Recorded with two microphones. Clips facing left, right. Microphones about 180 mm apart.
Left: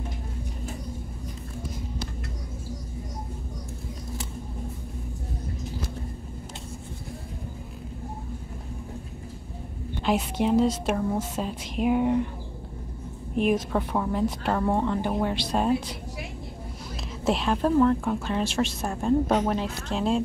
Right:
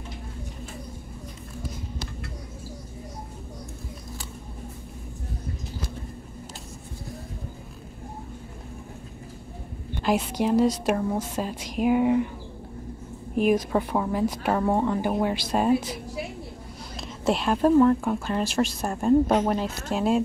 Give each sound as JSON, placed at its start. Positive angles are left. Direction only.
{"t": 10.0, "sound": "a woman's voice", "side_deg": 0}
{"t": 13.4, "sound": "a woman's voice", "side_deg": -5}
{"t": 17.2, "sound": "a woman's voice", "side_deg": 0}